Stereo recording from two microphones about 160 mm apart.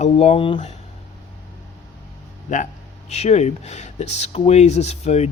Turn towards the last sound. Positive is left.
turn(degrees=40)  # may be behind; listen again after turning